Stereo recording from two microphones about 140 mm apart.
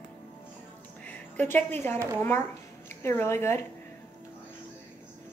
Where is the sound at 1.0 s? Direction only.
10° left (ahead or behind).